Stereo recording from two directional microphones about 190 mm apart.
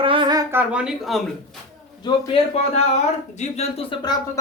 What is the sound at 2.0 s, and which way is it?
Speech, 25° left (ahead or behind).